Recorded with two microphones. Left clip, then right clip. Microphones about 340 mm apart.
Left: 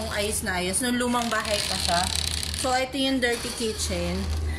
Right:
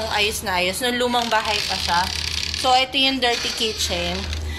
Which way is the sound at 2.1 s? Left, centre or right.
Left.